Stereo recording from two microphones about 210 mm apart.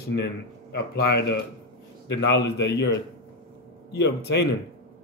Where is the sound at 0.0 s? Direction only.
50° left (ahead or behind).